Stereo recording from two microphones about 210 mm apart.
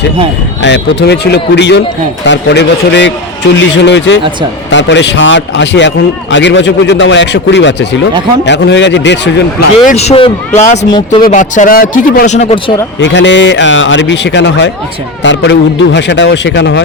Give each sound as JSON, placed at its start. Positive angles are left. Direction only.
{"t": 0.6, "sound": "a man's voice", "side_deg": 55}
{"t": 9.8, "sound": "a man's voice", "side_deg": 30}
{"t": 11.3, "sound": "a man's voice", "side_deg": 35}
{"t": 13.0, "sound": "a man's voice", "side_deg": 60}